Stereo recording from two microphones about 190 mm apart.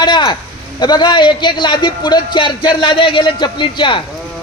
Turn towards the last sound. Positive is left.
turn(degrees=25)  # may be behind; listen again after turning